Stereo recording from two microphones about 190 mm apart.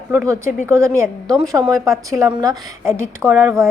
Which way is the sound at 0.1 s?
15° right (ahead or behind).